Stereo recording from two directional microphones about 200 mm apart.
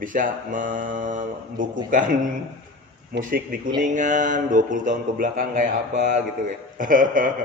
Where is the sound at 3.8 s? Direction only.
40° right (ahead or behind).